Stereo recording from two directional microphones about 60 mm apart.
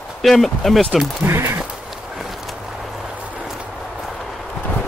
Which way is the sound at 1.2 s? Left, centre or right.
Right.